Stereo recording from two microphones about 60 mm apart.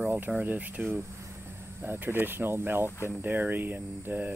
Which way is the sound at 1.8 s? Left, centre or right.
Right.